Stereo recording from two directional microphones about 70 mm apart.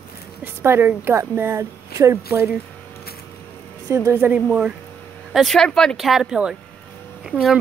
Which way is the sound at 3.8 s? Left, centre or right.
Right.